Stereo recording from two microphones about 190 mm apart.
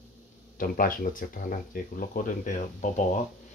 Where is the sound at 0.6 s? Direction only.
45° left (ahead or behind).